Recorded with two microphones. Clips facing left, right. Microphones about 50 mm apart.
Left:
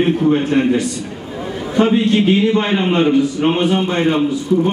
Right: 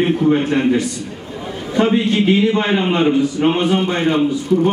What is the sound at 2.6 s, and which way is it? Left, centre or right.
A man's voice, centre.